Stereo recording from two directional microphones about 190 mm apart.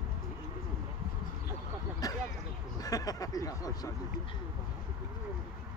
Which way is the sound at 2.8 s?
20° left (ahead or behind).